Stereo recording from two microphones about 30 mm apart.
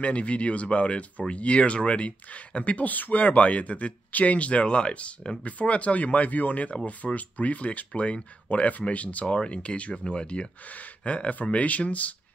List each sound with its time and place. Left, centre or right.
0.0 s speech: left
2.9 s speech: left
5.4 s speech: left
9.3 s speech: left